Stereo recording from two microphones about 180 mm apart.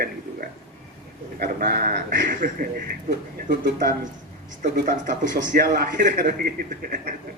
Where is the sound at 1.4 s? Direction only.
55° right (ahead or behind).